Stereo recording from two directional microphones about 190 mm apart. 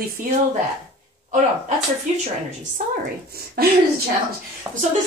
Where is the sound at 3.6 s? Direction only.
55° right (ahead or behind).